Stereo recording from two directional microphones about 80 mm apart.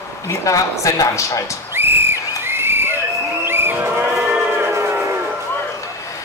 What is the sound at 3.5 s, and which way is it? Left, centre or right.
Vehicle, right.